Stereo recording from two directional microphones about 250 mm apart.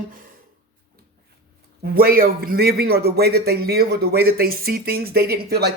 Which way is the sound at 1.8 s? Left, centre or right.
Right.